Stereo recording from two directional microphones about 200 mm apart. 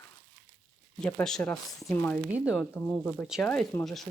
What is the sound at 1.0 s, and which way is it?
Speech, 5° left (ahead or behind).